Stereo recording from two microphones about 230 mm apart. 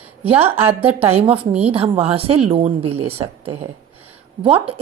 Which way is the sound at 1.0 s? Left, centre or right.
Right.